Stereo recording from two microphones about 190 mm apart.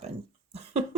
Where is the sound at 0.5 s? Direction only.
35° right (ahead or behind).